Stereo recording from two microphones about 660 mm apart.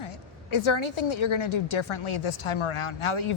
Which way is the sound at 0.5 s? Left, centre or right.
Left.